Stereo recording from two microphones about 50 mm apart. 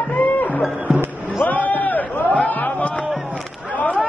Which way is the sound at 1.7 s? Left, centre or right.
Left.